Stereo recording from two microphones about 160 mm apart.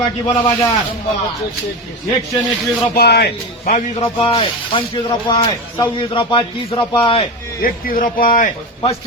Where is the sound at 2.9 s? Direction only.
90° left.